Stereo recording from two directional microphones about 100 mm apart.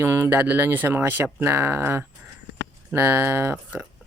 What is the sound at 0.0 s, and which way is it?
Speech, 20° right (ahead or behind).